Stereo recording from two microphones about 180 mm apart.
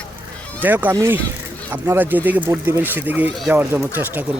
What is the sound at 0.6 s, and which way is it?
Speech, 10° right (ahead or behind).